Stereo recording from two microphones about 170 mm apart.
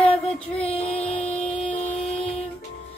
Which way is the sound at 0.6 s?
35° left (ahead or behind).